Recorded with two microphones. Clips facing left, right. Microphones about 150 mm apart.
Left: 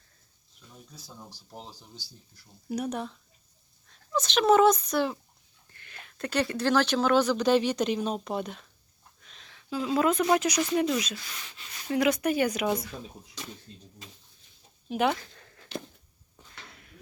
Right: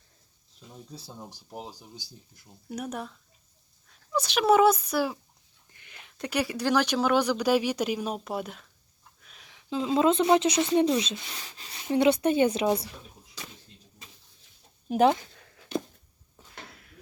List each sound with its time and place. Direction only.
0.9 s speech: 30° right (ahead or behind)
1.3 s speech: 15° right (ahead or behind)
2.6 s speech: centre (ahead or behind)
4.1 s speech: 10° right (ahead or behind); by 12.9 s 30° right (ahead or behind)
14.8 s speech: 40° right (ahead or behind)
15.3 s a sound: 5° right (ahead or behind)